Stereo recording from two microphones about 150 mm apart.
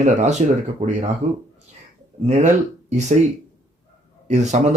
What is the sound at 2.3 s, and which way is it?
Speech, 50° right (ahead or behind).